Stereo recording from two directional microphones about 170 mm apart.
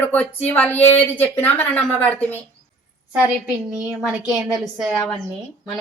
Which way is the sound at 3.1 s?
5° right (ahead or behind).